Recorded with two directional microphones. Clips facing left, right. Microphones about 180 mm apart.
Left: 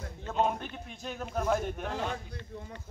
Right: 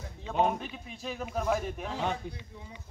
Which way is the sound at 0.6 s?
Centre (ahead or behind).